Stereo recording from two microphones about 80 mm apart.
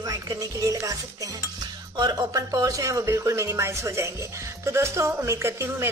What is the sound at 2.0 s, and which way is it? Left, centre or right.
Speech, right.